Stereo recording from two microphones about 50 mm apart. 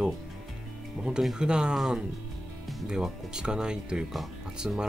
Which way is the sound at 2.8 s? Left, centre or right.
Centre.